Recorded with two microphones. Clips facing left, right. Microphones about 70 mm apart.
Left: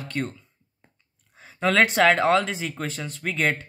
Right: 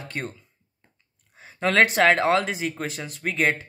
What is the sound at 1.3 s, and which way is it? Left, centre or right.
Speech, centre.